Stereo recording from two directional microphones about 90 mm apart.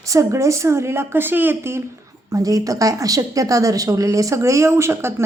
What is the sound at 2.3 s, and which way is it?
A woman's voice, 40° right (ahead or behind).